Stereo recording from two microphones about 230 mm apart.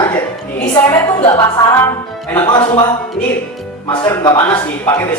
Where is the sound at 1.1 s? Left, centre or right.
Centre.